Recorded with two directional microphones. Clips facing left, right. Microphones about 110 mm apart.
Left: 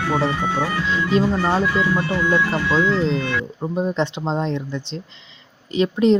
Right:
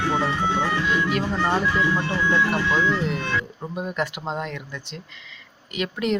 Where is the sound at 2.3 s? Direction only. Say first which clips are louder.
Left 1 dB; 15° left (ahead or behind).